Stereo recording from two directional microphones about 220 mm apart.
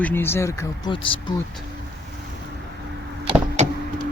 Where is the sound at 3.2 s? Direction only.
25° right (ahead or behind).